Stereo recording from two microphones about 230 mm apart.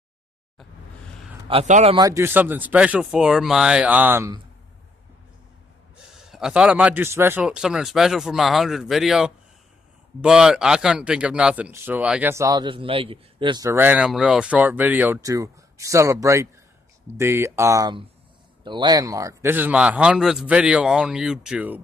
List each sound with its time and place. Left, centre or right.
1.5 s a man's voice: right
2.0 s speech: centre
5.9 s a man's voice: centre